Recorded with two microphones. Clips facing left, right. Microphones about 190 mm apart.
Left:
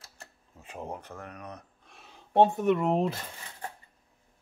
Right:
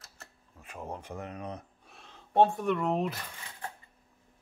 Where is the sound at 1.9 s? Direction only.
Centre (ahead or behind).